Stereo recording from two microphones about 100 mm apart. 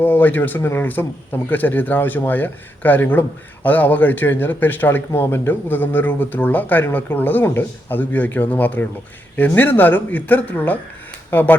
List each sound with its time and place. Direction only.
0.0 s speech: 20° left (ahead or behind)